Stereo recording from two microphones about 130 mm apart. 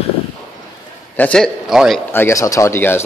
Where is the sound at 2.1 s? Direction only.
20° left (ahead or behind).